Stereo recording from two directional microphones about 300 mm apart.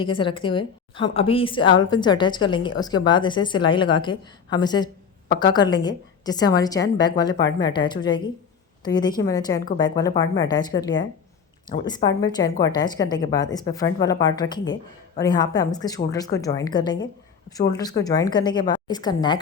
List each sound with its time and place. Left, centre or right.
0.0 s a woman's voice: centre